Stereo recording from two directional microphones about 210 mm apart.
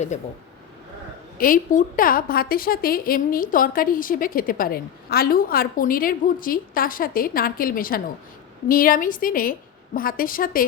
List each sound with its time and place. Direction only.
0.1 s a woman's voice: 35° left (ahead or behind)
1.4 s a woman's voice: 40° left (ahead or behind)